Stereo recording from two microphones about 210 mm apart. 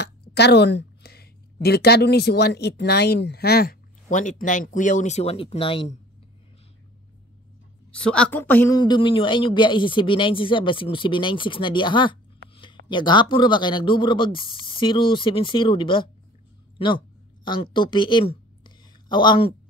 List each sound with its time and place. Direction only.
0.0 s a woman's voice: 50° left (ahead or behind); by 5.9 s 25° left (ahead or behind)
7.9 s a woman's voice: 5° left (ahead or behind); by 19.5 s 20° left (ahead or behind)